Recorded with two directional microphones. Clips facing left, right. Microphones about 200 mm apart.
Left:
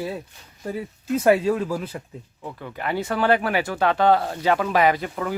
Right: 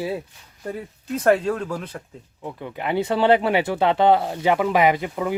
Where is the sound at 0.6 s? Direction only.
5° left (ahead or behind).